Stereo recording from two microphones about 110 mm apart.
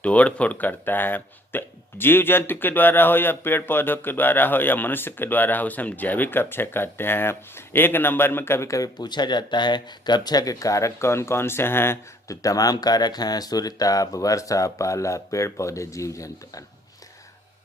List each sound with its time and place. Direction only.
0.0 s speech: 15° left (ahead or behind); by 16.6 s 30° left (ahead or behind)